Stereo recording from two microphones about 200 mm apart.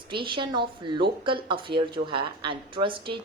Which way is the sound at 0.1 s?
25° right (ahead or behind).